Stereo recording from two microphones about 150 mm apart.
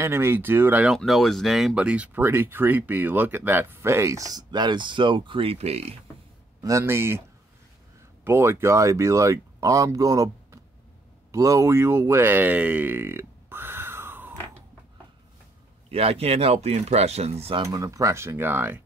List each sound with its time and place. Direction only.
0.0 s speech: 15° right (ahead or behind)
0.9 s speech: centre (ahead or behind); by 5.9 s 45° right (ahead or behind)
6.6 s speech: 20° right (ahead or behind)
15.9 s speech: 40° right (ahead or behind)
17.6 s speech: 25° right (ahead or behind)